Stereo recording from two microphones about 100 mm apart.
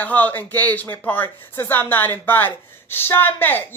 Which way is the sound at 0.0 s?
15° left (ahead or behind).